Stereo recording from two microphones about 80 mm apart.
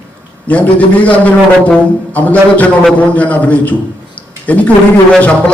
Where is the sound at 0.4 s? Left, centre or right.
Centre.